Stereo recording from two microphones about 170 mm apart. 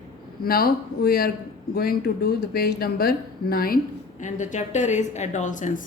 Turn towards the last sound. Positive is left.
turn(degrees=50)  # may be behind; listen again after turning